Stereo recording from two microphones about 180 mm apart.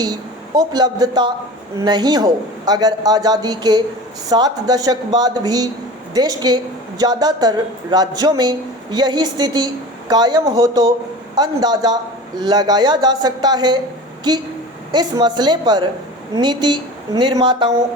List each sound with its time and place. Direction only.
0.0 s a man's voice: 20° right (ahead or behind)